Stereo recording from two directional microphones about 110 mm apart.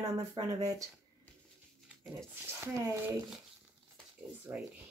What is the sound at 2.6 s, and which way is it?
Speech, 20° right (ahead or behind).